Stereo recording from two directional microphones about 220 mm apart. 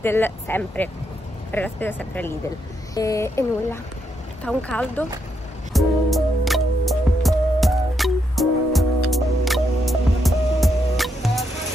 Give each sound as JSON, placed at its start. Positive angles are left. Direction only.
{"t": 0.0, "sound": "speech", "side_deg": 10}
{"t": 5.7, "sound": "music", "side_deg": 0}